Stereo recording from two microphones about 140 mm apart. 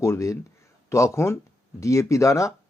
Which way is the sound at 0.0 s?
20° left (ahead or behind).